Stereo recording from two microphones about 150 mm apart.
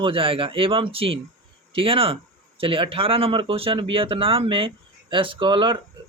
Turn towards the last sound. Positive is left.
turn(degrees=-35)  # may be behind; listen again after turning